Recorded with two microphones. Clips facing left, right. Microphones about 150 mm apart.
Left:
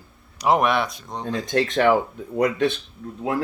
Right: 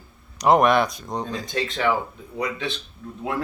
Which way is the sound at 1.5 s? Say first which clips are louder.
Left 6 dB; 50° left (ahead or behind).